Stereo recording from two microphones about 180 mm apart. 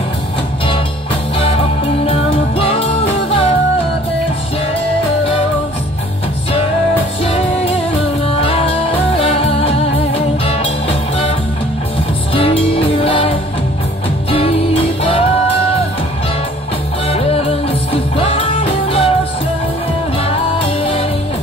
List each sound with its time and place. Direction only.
1.4 s music: 35° left (ahead or behind)
7.2 s music: 30° left (ahead or behind)
12.4 s music: 30° left (ahead or behind)
17.1 s music: 35° left (ahead or behind)
20.2 s music: 30° left (ahead or behind)